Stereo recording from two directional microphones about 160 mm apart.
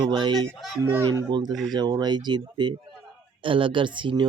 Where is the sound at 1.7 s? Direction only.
25° right (ahead or behind).